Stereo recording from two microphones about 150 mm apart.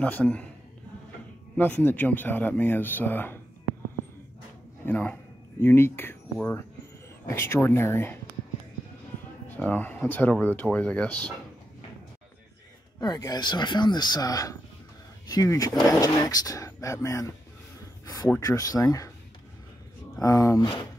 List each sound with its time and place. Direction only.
0.0 s speech: 10° left (ahead or behind)
1.6 s speech: 15° left (ahead or behind)
4.8 s speech: 10° left (ahead or behind)
9.6 s speech: 10° left (ahead or behind)
13.0 s speech: 25° left (ahead or behind)
20.2 s speech: 20° left (ahead or behind)